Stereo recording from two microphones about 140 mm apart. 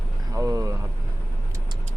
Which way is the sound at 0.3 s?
20° right (ahead or behind).